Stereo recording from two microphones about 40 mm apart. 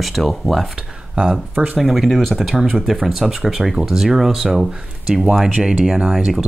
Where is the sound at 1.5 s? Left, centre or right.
Right.